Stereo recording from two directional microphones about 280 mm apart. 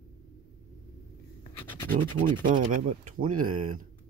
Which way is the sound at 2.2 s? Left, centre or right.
Right.